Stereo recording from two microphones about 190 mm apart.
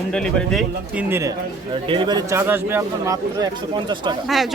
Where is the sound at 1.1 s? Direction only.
15° right (ahead or behind).